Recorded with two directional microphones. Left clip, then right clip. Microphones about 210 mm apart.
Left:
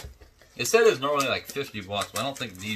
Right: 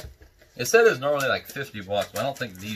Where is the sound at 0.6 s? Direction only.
15° left (ahead or behind).